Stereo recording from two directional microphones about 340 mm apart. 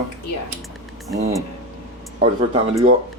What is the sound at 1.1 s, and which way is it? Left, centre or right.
Speech, centre.